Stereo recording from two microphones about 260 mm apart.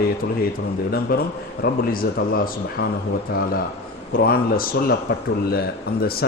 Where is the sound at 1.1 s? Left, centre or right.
Left.